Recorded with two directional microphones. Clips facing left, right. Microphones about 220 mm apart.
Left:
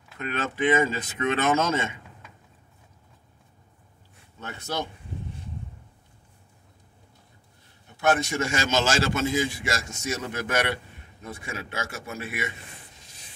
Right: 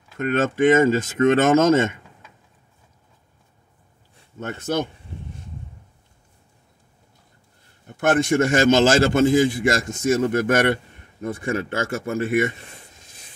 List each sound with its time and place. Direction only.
0.2 s a man's voice: 45° right (ahead or behind)
4.4 s a man's voice: 50° right (ahead or behind)
7.8 s a man's voice: 50° right (ahead or behind)